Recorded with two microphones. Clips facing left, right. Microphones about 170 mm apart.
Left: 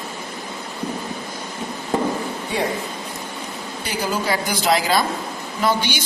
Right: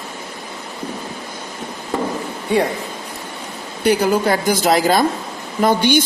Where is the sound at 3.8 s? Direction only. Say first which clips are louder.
Right 10 dB; 60° right (ahead or behind).